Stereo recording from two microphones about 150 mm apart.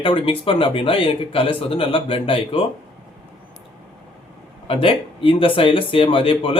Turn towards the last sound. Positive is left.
turn(degrees=35)  # may be behind; listen again after turning